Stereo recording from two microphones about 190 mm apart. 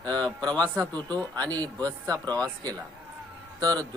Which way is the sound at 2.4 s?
20° right (ahead or behind).